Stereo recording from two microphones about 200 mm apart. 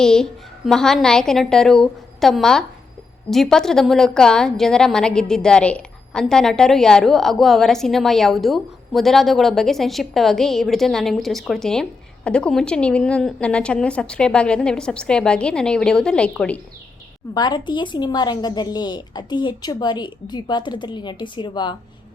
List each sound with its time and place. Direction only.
0.0 s a woman's voice: 5° left (ahead or behind)
17.3 s a woman's voice: 20° left (ahead or behind)